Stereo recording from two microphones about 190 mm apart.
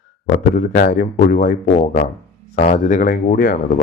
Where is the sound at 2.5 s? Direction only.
45° left (ahead or behind).